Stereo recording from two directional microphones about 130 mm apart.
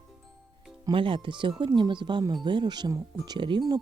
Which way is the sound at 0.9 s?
40° right (ahead or behind).